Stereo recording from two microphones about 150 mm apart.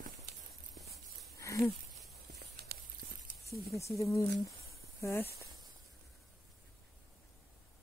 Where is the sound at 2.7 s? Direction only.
90° right.